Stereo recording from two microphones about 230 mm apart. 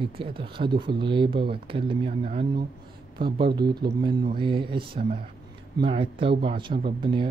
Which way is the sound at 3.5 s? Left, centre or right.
Centre.